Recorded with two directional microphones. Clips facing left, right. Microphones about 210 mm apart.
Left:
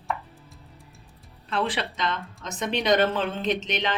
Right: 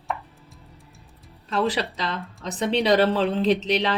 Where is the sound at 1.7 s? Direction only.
35° right (ahead or behind).